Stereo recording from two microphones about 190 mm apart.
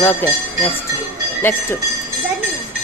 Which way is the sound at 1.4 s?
10° left (ahead or behind).